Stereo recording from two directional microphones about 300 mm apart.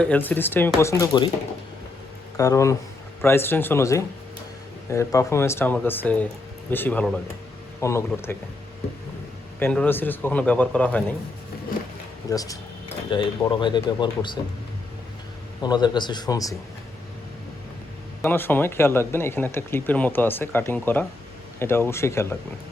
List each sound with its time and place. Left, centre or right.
0.0 s speech: centre
2.4 s speech: centre
9.6 s speech: centre
12.3 s speech: centre
15.6 s speech: centre
18.2 s speech: centre